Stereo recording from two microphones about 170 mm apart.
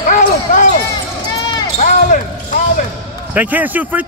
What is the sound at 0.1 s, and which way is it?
Basketball bounce, 50° left (ahead or behind).